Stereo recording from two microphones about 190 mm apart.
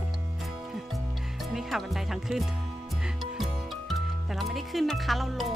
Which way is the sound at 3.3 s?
Centre (ahead or behind).